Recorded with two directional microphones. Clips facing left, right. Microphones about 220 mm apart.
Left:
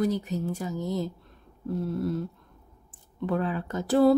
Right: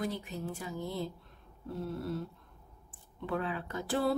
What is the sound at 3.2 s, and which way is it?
Speech, 40° left (ahead or behind).